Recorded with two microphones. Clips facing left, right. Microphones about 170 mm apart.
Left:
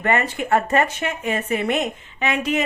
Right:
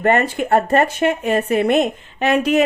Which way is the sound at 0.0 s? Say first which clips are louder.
Right 5 dB; 35° right (ahead or behind).